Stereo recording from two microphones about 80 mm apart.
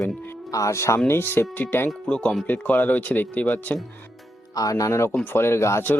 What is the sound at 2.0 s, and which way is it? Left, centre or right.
Speech, centre.